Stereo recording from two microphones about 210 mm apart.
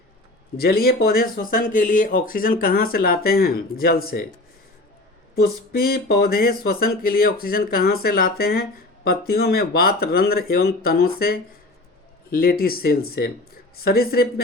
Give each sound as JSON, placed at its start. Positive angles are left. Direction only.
{"t": 0.5, "sound": "speech", "side_deg": 45}
{"t": 5.3, "sound": "speech", "side_deg": 45}